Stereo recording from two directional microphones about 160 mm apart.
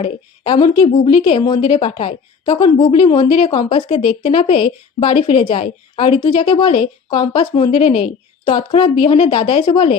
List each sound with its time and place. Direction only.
0.0 s a woman's voice: 30° left (ahead or behind)